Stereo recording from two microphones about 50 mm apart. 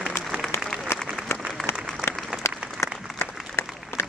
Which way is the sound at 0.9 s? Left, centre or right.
Left.